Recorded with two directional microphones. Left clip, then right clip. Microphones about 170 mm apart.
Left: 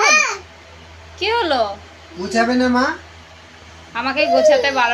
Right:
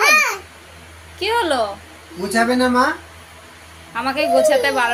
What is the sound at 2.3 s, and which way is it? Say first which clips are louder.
Speech: right 1 dB; 20° right (ahead or behind).